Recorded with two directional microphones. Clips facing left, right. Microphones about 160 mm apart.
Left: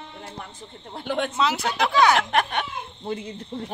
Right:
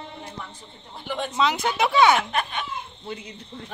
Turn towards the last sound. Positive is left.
turn(degrees=45)  # may be behind; listen again after turning